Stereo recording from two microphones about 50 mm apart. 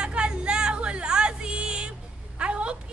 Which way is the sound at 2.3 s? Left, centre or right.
Right.